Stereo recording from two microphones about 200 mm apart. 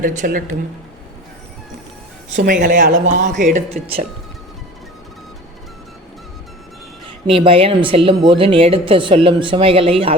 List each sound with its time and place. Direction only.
0.0 s speech: 45° right (ahead or behind)
2.3 s speech: 45° right (ahead or behind)
7.3 s speech: 30° right (ahead or behind)